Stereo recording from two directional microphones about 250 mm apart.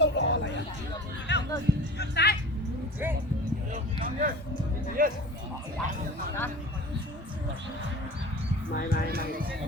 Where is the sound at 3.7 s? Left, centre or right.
Right.